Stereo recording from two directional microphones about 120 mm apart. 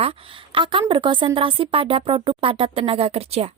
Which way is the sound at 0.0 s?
50° right (ahead or behind).